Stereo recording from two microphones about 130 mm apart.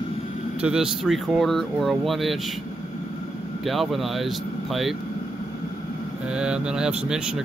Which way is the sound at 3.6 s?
Centre (ahead or behind).